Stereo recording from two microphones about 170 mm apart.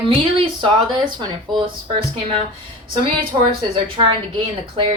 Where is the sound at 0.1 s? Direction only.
30° right (ahead or behind).